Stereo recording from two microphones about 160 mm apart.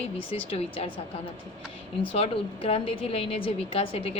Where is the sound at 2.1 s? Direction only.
35° left (ahead or behind).